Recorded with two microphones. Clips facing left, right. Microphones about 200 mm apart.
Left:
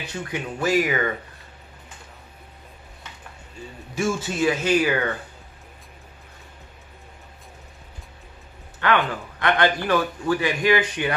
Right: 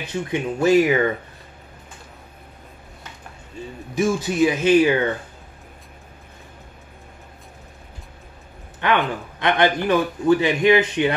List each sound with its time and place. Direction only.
0.0 s a man's voice: 20° right (ahead or behind)
3.9 s speech: 15° right (ahead or behind)
8.7 s a man's voice: 20° right (ahead or behind)